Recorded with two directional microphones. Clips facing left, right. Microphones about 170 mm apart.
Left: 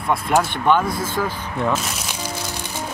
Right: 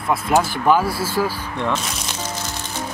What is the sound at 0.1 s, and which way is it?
Speech, centre (ahead or behind).